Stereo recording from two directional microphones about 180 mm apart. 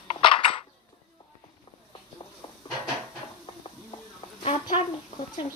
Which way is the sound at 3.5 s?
30° left (ahead or behind).